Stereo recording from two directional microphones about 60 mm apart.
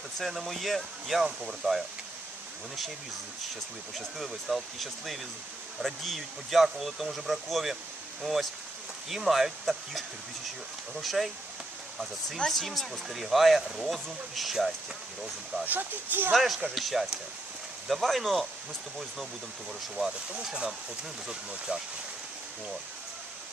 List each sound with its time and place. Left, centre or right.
0.2 s speech: centre
3.9 s speech: centre
11.0 s speech: centre
12.5 s speech: centre
15.6 s speech: right
16.3 s speech: centre
20.4 s speech: centre
21.7 s speech: centre